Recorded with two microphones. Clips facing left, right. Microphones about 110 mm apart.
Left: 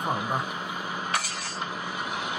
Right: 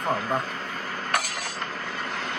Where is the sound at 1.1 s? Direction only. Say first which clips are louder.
Right 3 dB; 55° right (ahead or behind).